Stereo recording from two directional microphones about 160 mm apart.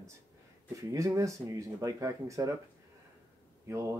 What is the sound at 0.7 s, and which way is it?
Speech, 20° right (ahead or behind).